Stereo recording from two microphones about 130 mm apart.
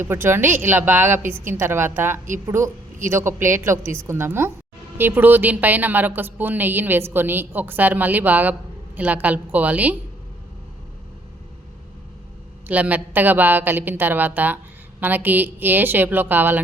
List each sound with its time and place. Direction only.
0.0 s a woman's voice: 20° right (ahead or behind)
12.6 s a woman's voice: 10° right (ahead or behind)